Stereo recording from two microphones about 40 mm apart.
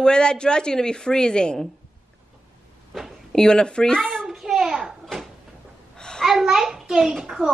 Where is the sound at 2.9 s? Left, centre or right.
Centre.